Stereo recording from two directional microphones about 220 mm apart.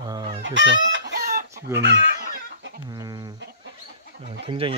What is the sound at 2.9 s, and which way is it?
Speech, 15° right (ahead or behind).